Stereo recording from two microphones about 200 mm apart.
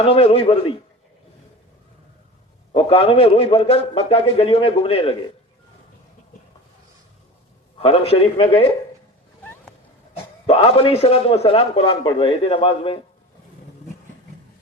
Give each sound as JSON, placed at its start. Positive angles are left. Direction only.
{"t": 0.1, "sound": "a man's voice", "side_deg": 30}
{"t": 2.7, "sound": "a man's voice", "side_deg": 30}
{"t": 7.8, "sound": "a man's voice", "side_deg": 30}
{"t": 10.4, "sound": "a man's voice", "side_deg": 30}